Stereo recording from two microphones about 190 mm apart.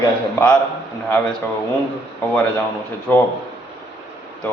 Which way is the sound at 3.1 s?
10° left (ahead or behind).